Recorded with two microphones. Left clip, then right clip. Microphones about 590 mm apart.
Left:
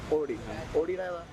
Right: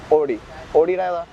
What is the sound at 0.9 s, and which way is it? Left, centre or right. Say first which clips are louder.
Speech: right 12 dB; right.